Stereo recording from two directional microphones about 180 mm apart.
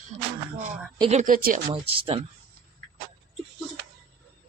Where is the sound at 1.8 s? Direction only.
35° right (ahead or behind).